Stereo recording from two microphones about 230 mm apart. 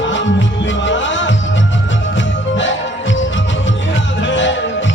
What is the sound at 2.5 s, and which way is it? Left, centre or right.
Music, left.